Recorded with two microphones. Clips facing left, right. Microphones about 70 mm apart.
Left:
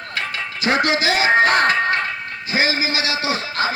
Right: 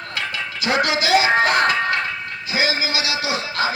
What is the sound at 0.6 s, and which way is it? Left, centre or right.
Music, left.